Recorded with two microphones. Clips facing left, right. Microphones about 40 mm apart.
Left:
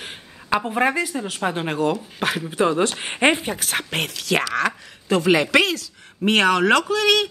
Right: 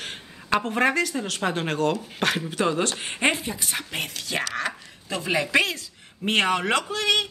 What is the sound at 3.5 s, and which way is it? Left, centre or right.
Speech, left.